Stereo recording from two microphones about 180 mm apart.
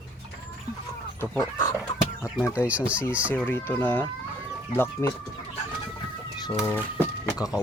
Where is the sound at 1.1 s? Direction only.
15° left (ahead or behind).